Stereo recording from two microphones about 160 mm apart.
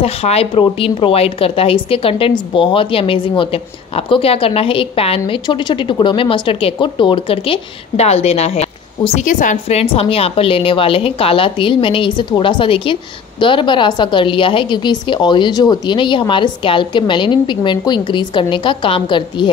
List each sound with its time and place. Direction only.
0.0 s a woman's voice: 40° left (ahead or behind)
9.2 s a woman's voice: 50° left (ahead or behind); by 19.5 s 30° left (ahead or behind)